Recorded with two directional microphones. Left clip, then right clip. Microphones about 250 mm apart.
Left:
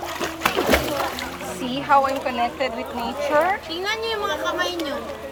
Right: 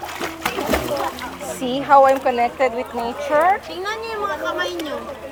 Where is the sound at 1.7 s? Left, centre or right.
Right.